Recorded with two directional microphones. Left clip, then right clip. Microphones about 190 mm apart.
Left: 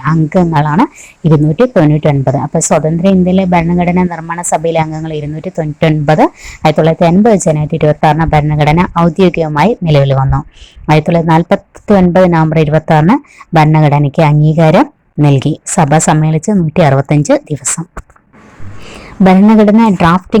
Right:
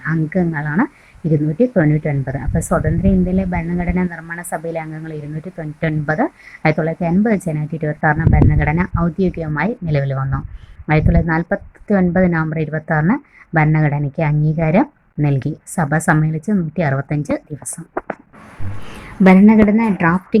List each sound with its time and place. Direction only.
0.0 s speech: 30° left (ahead or behind)
18.9 s a woman's voice: 30° left (ahead or behind)